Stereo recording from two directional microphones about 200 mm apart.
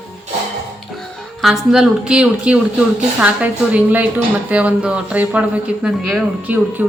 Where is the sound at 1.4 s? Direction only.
Centre (ahead or behind).